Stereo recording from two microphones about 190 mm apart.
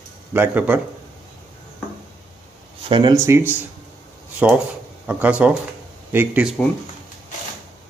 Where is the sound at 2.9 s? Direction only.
25° right (ahead or behind).